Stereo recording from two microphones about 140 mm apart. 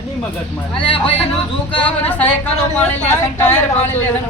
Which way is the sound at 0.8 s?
40° left (ahead or behind).